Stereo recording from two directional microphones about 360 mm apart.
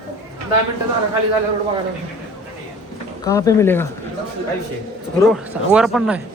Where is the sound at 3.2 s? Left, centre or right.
Centre.